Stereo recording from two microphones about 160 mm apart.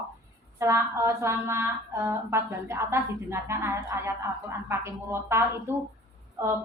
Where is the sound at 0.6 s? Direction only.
15° right (ahead or behind).